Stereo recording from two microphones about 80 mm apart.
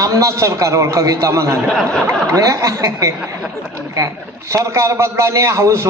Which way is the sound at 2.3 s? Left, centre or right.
Right.